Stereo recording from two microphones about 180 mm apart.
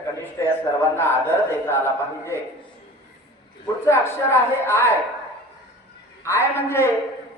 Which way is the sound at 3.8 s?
15° left (ahead or behind).